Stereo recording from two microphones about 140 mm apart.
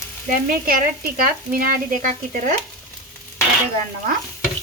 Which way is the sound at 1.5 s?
75° right (ahead or behind).